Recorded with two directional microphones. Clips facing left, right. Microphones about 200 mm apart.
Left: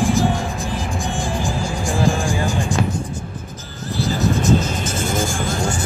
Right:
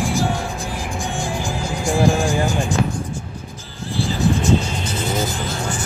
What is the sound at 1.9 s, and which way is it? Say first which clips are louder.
Vehicle: right 3 dB; 15° right (ahead or behind).